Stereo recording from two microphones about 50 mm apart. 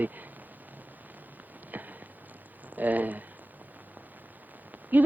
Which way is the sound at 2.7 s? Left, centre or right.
Right.